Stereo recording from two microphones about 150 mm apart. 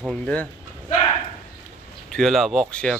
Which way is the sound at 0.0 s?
5° left (ahead or behind).